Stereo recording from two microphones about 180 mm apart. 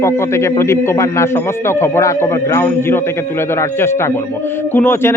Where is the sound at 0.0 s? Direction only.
15° left (ahead or behind).